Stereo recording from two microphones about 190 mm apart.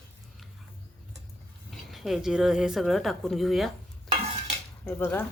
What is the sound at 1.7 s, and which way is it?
Speech, centre (ahead or behind).